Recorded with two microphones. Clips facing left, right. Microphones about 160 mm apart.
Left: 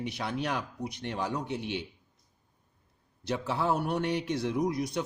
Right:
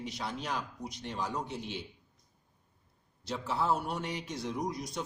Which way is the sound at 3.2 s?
65° left (ahead or behind).